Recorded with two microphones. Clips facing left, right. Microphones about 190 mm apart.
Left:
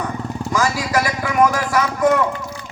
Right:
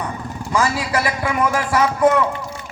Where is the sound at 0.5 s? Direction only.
30° right (ahead or behind).